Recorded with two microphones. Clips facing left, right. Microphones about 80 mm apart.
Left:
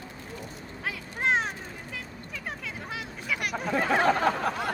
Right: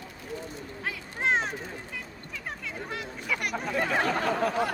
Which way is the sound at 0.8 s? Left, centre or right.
Centre.